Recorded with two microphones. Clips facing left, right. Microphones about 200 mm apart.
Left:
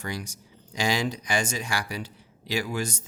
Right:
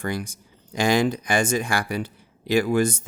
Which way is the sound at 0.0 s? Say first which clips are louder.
Right 6 dB; 55° right (ahead or behind).